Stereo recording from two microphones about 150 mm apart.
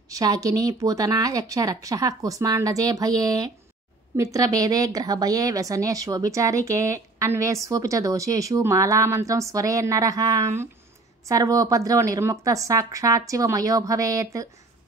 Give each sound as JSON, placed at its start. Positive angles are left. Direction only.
{"t": 0.1, "sound": "a woman's voice", "side_deg": -25}